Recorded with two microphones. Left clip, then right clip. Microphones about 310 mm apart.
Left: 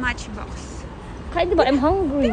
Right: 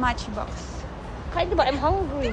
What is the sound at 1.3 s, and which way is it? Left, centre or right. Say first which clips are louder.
Speech: left 4 dB; left.